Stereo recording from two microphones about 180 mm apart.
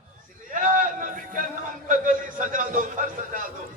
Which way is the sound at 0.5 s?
45° right (ahead or behind).